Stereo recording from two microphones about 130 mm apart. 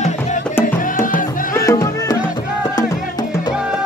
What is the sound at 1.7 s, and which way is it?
Music, 25° left (ahead or behind).